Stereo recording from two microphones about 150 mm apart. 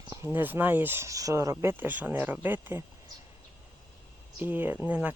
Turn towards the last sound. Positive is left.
turn(degrees=-10)  # may be behind; listen again after turning